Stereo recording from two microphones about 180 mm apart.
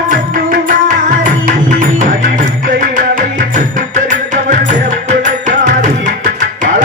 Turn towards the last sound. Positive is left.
turn(degrees=-45)  # may be behind; listen again after turning